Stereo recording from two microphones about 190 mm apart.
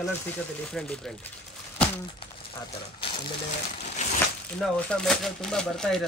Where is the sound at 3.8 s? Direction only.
40° left (ahead or behind).